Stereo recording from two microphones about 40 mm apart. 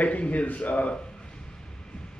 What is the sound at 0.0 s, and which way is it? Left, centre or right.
Speech, left.